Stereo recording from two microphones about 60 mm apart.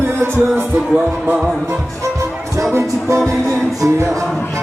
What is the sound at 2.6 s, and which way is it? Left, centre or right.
Music, right.